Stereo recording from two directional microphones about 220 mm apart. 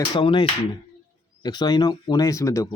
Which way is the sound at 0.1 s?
20° left (ahead or behind).